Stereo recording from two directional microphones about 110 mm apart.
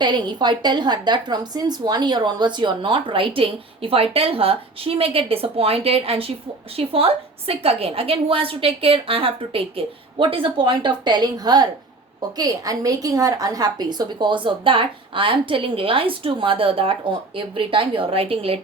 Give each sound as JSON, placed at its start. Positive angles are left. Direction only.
{"t": 0.0, "sound": "a woman's voice", "side_deg": -45}